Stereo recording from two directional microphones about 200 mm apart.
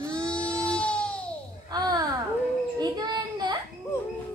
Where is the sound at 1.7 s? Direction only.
20° right (ahead or behind).